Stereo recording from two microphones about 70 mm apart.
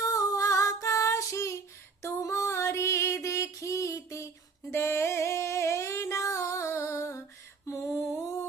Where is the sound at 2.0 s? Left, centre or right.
Left.